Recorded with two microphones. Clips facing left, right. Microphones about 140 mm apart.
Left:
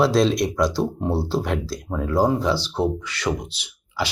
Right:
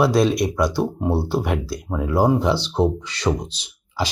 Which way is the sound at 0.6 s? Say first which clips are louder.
Right 1 dB; 55° right (ahead or behind).